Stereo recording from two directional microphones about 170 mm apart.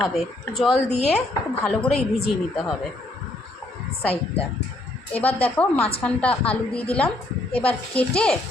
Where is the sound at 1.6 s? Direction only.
5° left (ahead or behind).